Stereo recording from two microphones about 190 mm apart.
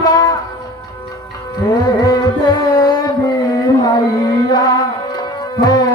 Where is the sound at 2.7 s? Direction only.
20° left (ahead or behind).